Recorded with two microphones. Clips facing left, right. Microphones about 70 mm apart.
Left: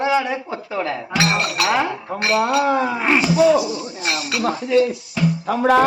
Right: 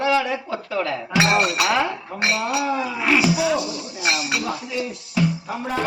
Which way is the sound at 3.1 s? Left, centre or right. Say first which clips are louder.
Even; centre.